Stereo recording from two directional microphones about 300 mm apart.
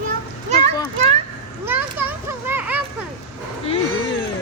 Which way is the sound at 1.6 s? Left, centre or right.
Centre.